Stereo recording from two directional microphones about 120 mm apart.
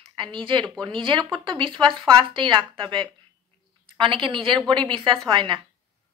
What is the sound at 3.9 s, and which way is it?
A woman's voice, 45° right (ahead or behind).